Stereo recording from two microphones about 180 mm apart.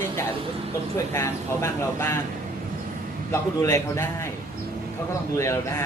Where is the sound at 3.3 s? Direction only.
15° left (ahead or behind).